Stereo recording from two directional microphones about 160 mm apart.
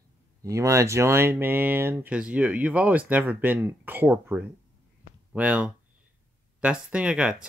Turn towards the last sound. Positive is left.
turn(degrees=-5)  # may be behind; listen again after turning